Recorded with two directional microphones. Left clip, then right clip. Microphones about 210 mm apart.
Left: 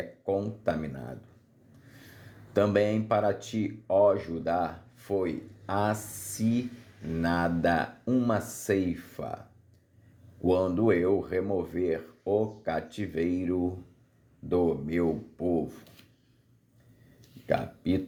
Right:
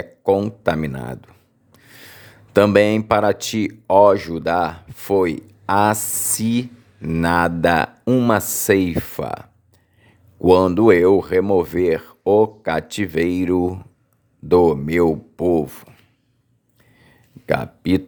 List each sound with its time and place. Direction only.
0.0 s speech: 45° right (ahead or behind)
2.5 s speech: 35° right (ahead or behind)
8.0 s speech: 40° right (ahead or behind)
17.4 s a sound: 35° right (ahead or behind)